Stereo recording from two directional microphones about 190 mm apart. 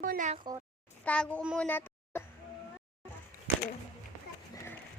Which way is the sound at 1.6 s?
10° left (ahead or behind).